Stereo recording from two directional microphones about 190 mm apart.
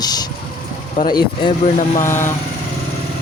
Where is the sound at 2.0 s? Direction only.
15° left (ahead or behind).